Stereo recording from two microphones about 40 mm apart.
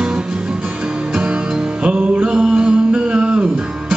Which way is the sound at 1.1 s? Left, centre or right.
Right.